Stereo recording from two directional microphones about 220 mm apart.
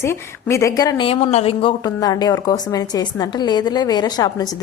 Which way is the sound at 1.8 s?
15° left (ahead or behind).